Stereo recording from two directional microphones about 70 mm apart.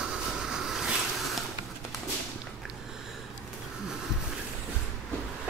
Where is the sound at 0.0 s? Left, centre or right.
Centre.